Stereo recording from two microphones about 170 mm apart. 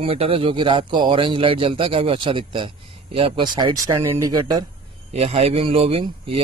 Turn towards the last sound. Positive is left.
turn(degrees=-35)  # may be behind; listen again after turning